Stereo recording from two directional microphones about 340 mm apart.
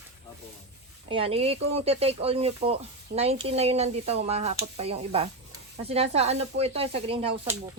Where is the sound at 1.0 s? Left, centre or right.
Centre.